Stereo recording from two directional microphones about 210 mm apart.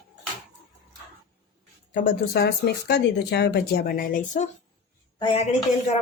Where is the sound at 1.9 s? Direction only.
45° left (ahead or behind).